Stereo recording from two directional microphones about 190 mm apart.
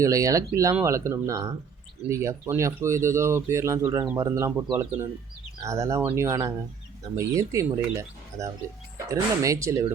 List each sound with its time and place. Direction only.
0.0 s speech: 15° right (ahead or behind)